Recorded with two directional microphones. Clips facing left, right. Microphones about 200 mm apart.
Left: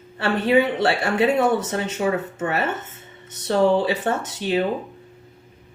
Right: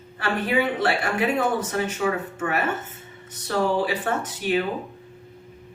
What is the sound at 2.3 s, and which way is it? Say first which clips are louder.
Speech: left 1 dB; 25° left (ahead or behind).